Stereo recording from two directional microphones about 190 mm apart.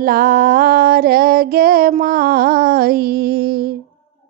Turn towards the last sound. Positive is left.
turn(degrees=-55)  # may be behind; listen again after turning